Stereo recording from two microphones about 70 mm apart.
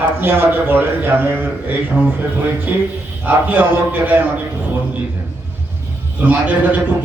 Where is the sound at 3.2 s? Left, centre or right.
Right.